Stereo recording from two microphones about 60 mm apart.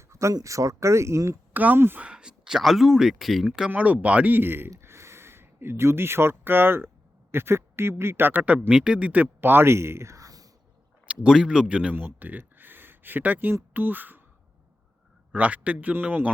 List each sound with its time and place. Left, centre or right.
0.1 s a sound: right
0.3 s speech: right
1.5 s speech: right
2.0 s speech: centre
3.7 s speech: right
8.7 s speech: centre
9.2 s speech: right
11.1 s speech: centre
11.9 s a sound: right
13.5 s speech: right
15.3 s speech: right